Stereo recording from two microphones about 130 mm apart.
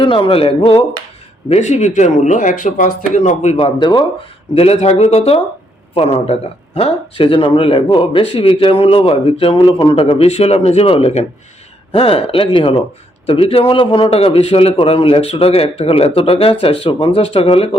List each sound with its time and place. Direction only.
0.0 s speech: 40° left (ahead or behind)
1.5 s speech: 60° left (ahead or behind)
3.6 s speech: 35° left (ahead or behind)
4.5 s speech: 50° left (ahead or behind)